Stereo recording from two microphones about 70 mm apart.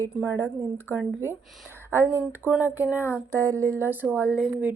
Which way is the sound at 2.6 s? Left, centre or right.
Right.